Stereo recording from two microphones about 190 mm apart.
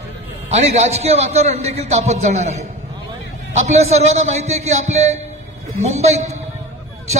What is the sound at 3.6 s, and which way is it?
A man's voice, 35° right (ahead or behind).